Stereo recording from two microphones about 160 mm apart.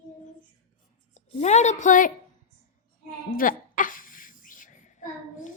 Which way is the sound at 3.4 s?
55° left (ahead or behind).